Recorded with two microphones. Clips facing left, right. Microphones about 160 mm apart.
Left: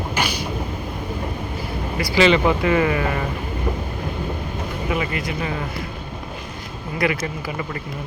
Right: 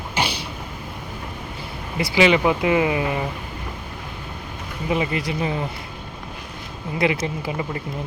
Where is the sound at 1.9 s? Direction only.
15° right (ahead or behind).